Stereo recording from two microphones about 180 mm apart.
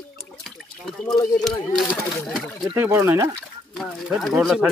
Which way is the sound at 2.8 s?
15° right (ahead or behind).